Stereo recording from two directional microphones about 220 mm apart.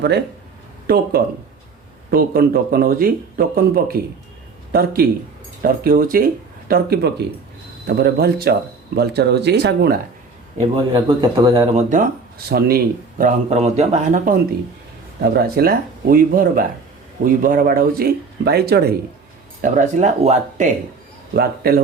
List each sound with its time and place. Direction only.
2.0 s speech: 45° right (ahead or behind)
10.6 s speech: 20° right (ahead or behind)
11.8 s speech: 35° right (ahead or behind)
15.2 s speech: 45° right (ahead or behind)
19.6 s speech: 35° right (ahead or behind)
21.3 s speech: 45° right (ahead or behind)